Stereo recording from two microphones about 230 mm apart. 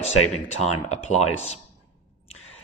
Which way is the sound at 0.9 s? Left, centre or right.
Left.